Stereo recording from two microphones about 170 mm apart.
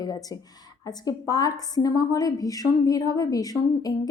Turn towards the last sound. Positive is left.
turn(degrees=20)  # may be behind; listen again after turning